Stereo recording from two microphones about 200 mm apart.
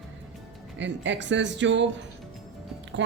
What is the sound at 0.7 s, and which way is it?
Speech, 65° right (ahead or behind).